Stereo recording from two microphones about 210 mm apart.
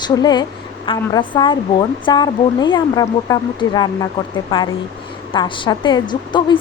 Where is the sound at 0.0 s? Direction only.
20° left (ahead or behind).